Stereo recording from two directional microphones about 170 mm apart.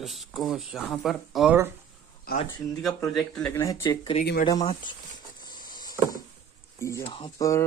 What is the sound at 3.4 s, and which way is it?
Speech, 15° left (ahead or behind).